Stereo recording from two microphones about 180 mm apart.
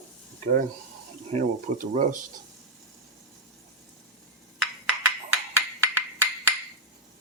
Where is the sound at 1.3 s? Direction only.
45° right (ahead or behind).